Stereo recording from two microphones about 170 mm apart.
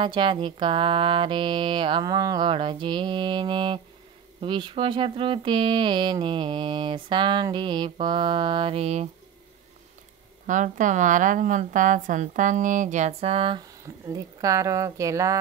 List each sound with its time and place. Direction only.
0.0 s speech: 30° right (ahead or behind)
10.4 s a woman's voice: 50° right (ahead or behind); by 13.7 s 30° right (ahead or behind)
14.0 s speech: 20° right (ahead or behind)